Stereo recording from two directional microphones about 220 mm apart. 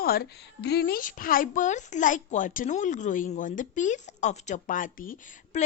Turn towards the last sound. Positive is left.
turn(degrees=35)  # may be behind; listen again after turning